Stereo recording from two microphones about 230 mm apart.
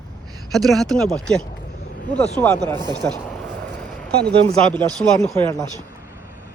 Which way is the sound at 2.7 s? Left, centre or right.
Centre.